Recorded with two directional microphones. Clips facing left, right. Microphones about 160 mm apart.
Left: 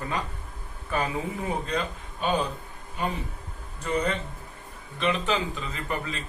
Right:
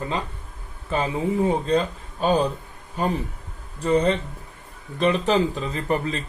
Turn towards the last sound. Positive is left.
turn(degrees=-35)  # may be behind; listen again after turning